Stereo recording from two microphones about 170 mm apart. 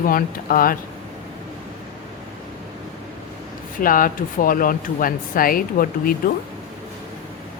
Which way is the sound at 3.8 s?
55° left (ahead or behind).